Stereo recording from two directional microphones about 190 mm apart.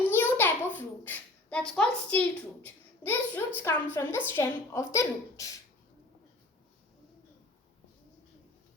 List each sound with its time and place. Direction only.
0.1 s a child's voice: 10° left (ahead or behind)